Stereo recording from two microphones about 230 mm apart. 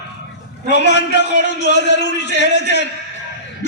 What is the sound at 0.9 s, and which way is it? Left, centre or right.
A man's voice, left.